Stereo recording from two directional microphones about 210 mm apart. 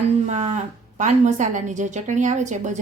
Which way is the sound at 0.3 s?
30° right (ahead or behind).